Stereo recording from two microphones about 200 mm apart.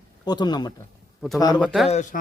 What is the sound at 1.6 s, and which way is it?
Speech, centre (ahead or behind).